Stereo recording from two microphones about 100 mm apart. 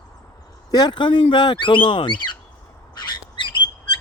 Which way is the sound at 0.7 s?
45° left (ahead or behind).